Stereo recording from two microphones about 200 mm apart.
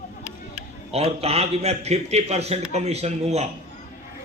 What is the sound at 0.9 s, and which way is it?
A man's voice, 30° right (ahead or behind).